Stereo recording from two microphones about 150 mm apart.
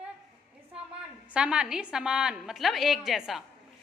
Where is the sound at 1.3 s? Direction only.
5° right (ahead or behind).